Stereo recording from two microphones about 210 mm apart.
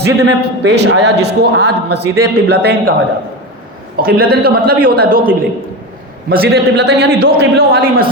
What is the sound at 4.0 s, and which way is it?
A man's voice, 45° right (ahead or behind).